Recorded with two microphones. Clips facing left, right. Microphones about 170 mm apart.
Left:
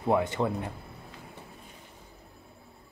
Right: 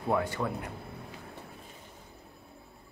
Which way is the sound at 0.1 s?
20° left (ahead or behind).